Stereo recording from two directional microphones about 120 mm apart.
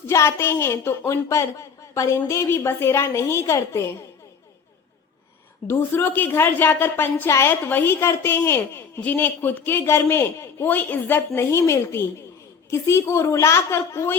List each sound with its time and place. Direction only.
0.1 s a woman's voice: 25° left (ahead or behind)
5.6 s a woman's voice: 20° left (ahead or behind)